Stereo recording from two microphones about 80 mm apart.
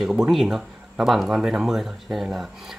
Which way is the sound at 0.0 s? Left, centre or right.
Centre.